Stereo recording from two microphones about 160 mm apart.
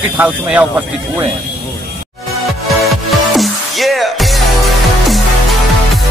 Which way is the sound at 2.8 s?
Centre (ahead or behind).